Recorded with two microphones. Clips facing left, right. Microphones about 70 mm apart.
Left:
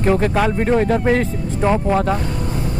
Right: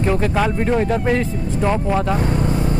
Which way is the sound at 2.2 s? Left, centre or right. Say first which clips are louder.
Right 4 dB; right.